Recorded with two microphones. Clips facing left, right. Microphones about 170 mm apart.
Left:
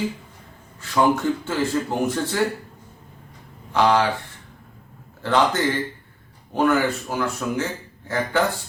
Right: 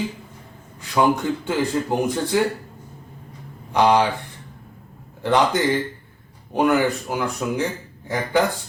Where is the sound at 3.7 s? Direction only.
15° right (ahead or behind).